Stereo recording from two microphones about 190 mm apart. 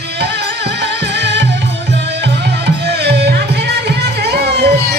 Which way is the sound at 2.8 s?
60° right (ahead or behind).